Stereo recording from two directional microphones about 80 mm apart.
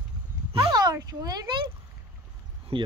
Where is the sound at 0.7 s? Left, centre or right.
Right.